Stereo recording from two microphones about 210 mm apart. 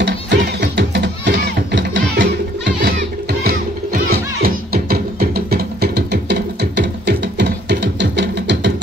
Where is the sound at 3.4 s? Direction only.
45° right (ahead or behind).